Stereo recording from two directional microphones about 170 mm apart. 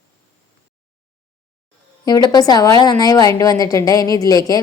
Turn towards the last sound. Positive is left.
turn(degrees=20)  # may be behind; listen again after turning